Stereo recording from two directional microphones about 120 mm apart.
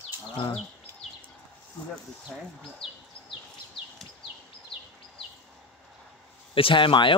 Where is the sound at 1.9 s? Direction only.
5° left (ahead or behind).